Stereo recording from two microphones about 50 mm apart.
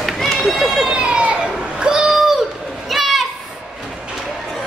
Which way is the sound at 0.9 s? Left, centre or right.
Centre.